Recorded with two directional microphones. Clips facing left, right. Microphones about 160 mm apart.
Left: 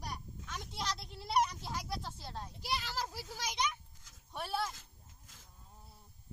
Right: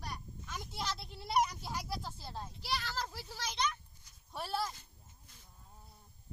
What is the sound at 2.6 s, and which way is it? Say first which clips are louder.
A child's voice: even; 10° left (ahead or behind).